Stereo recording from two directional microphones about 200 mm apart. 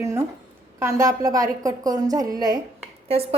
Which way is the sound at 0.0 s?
15° right (ahead or behind).